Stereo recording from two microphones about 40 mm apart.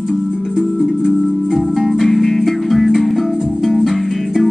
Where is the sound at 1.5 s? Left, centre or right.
Centre.